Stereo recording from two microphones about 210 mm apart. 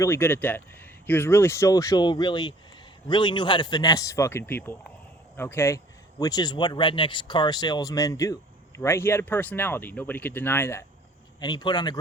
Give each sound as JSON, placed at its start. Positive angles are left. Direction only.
{"t": 0.0, "sound": "speech", "side_deg": 10}